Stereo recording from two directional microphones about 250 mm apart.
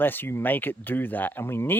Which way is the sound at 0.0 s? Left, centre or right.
Centre.